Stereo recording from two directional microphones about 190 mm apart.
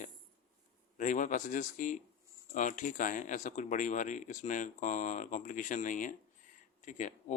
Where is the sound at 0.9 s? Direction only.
40° left (ahead or behind).